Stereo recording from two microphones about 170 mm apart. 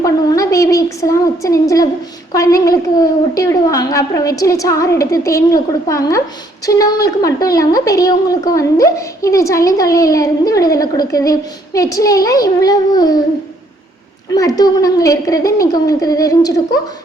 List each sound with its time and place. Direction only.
0.0 s a woman's voice: 20° left (ahead or behind)
14.3 s a woman's voice: 20° left (ahead or behind)